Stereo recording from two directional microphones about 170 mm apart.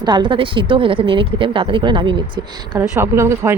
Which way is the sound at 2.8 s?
15° right (ahead or behind).